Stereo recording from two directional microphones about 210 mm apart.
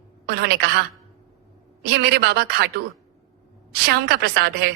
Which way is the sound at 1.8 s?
50° right (ahead or behind).